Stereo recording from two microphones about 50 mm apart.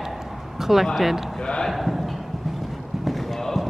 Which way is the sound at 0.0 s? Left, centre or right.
Centre.